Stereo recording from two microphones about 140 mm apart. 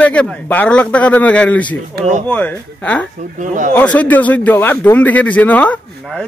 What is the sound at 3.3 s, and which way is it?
Speech, 65° right (ahead or behind).